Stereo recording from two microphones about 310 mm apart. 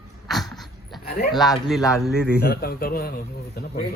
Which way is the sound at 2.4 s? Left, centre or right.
Left.